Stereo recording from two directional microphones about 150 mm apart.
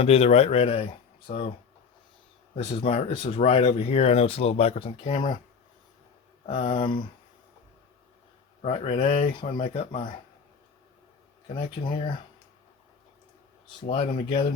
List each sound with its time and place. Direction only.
0.0 s speech: 45° left (ahead or behind)
2.6 s speech: 35° left (ahead or behind)
6.4 s speech: 40° left (ahead or behind)
8.6 s speech: 40° left (ahead or behind)
9.6 s speech: 45° left (ahead or behind)
11.4 s speech: 35° left (ahead or behind)
13.8 s speech: 40° left (ahead or behind)